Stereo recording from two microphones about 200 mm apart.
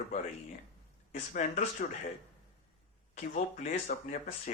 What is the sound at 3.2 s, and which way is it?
Speech, 35° left (ahead or behind).